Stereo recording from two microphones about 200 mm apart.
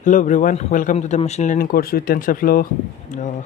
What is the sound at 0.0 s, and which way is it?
Speech, 40° left (ahead or behind).